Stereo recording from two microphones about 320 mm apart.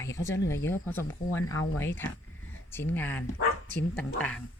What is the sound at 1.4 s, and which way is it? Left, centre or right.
Speech, left.